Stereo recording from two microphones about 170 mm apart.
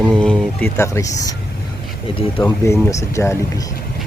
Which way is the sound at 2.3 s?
15° left (ahead or behind).